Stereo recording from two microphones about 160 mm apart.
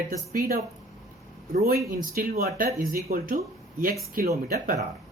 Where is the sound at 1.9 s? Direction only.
65° right (ahead or behind).